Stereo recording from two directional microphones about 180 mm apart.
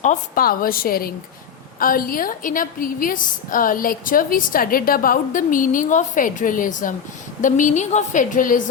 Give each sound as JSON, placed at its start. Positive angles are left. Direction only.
{"t": 0.0, "sound": "a woman's voice", "side_deg": 45}